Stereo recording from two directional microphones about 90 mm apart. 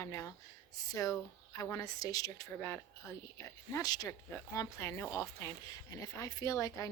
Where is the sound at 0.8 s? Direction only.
40° left (ahead or behind).